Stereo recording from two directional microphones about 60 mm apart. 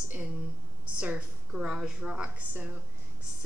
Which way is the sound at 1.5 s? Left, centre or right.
Centre.